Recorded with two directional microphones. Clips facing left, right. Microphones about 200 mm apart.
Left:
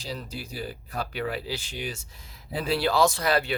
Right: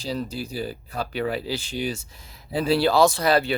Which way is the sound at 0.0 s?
30° right (ahead or behind).